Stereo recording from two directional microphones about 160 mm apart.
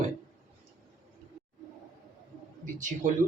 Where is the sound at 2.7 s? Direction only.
50° right (ahead or behind).